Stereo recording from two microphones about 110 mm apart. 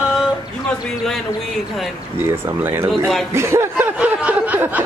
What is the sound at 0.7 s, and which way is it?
Speech, 5° left (ahead or behind).